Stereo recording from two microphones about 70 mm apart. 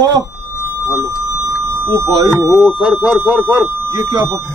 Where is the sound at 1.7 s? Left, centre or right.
Right.